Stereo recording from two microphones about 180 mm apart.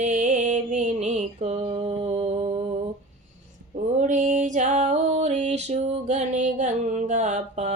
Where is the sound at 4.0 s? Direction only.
45° right (ahead or behind).